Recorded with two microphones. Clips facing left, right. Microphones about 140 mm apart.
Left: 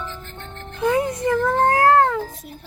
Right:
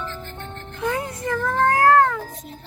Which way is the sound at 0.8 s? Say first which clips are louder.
Left 6 dB; 25° left (ahead or behind).